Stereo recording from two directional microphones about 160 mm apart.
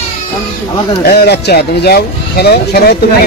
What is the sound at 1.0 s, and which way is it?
Speech, 80° left.